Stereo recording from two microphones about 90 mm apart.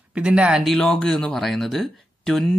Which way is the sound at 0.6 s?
5° left (ahead or behind).